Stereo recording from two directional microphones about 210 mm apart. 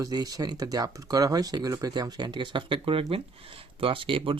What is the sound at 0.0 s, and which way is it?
Speech, 15° right (ahead or behind).